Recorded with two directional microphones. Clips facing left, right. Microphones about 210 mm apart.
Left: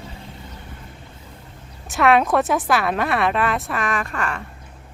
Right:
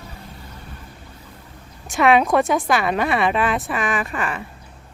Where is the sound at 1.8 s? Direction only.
Centre (ahead or behind).